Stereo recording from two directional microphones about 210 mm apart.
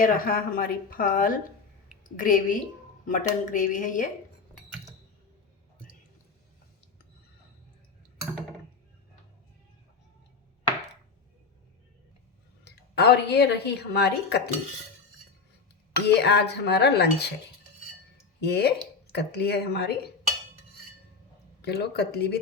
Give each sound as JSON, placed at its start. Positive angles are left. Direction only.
{"t": 0.0, "sound": "speech", "side_deg": 40}
{"t": 12.6, "sound": "speech", "side_deg": 50}
{"t": 16.0, "sound": "speech", "side_deg": 50}
{"t": 18.3, "sound": "speech", "side_deg": 55}
{"t": 21.6, "sound": "speech", "side_deg": 50}